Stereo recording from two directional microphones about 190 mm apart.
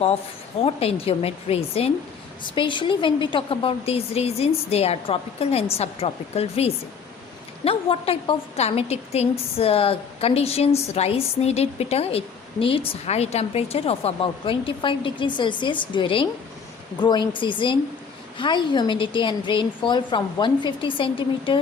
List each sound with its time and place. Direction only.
0.6 s a woman's voice: 30° left (ahead or behind)